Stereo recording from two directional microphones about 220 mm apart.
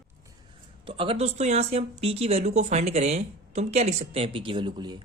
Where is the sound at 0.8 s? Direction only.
25° right (ahead or behind).